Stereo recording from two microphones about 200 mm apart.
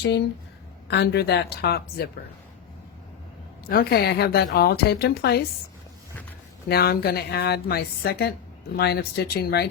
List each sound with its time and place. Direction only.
0.9 s a woman's voice: 55° left (ahead or behind)
3.7 s a woman's voice: 50° left (ahead or behind)
6.7 s a woman's voice: 50° left (ahead or behind)